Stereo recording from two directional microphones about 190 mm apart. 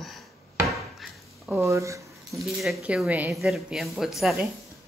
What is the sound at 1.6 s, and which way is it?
Speech, 15° right (ahead or behind).